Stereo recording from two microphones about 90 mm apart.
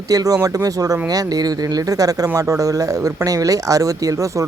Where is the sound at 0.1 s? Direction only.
45° right (ahead or behind).